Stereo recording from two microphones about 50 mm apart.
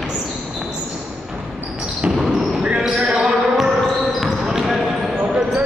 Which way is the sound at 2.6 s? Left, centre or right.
Centre.